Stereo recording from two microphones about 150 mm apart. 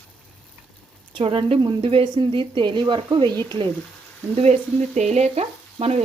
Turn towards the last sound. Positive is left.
turn(degrees=-45)  # may be behind; listen again after turning